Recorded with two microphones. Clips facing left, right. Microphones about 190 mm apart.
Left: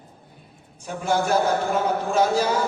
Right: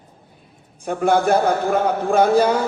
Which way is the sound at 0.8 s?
55° right (ahead or behind).